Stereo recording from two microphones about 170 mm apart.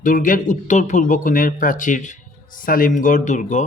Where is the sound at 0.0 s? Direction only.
55° left (ahead or behind).